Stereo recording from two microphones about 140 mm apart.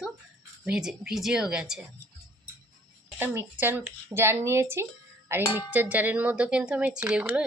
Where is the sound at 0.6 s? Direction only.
5° right (ahead or behind).